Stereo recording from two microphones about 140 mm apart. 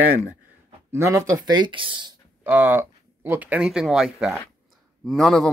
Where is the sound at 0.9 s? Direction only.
20° right (ahead or behind); by 2.1 s 35° right (ahead or behind).